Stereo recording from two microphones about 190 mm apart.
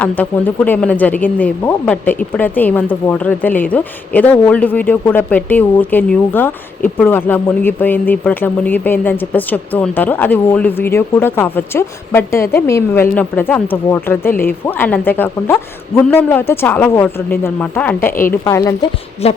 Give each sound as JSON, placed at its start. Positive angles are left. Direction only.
{"t": 0.0, "sound": "speech", "side_deg": 10}
{"t": 19.2, "sound": "speech", "side_deg": 30}